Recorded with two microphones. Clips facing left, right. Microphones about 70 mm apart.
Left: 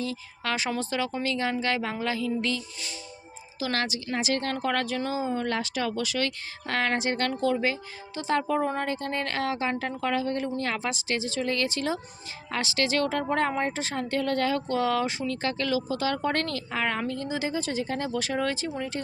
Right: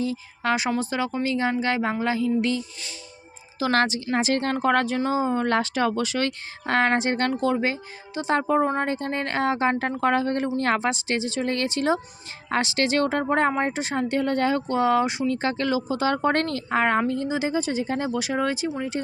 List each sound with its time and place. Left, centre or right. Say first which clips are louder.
0.0 s speech: right 6 dB; right
3.6 s speech: right 7 dB; right
7.3 s speech: right 3 dB; right